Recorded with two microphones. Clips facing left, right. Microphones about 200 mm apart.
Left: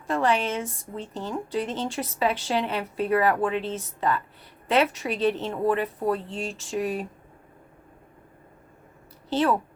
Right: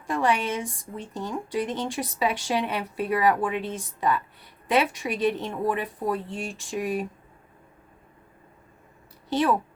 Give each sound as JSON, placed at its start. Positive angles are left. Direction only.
{"t": 0.1, "sound": "a woman's voice", "side_deg": -15}
{"t": 9.3, "sound": "a woman's voice", "side_deg": -15}